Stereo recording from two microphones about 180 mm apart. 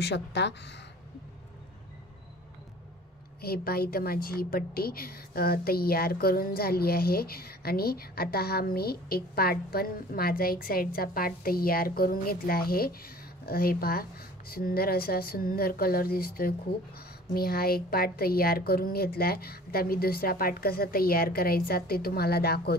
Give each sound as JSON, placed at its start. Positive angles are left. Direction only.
{"t": 0.0, "sound": "speech", "side_deg": 75}
{"t": 3.3, "sound": "a woman's voice", "side_deg": 60}